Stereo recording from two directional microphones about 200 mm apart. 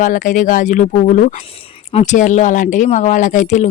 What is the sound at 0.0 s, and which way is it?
Speech, 40° left (ahead or behind).